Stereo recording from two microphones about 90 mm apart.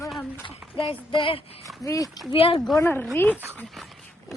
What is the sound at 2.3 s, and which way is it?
Speech, 85° left.